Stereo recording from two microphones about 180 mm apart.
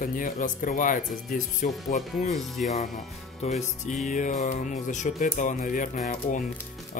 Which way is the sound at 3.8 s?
45° left (ahead or behind).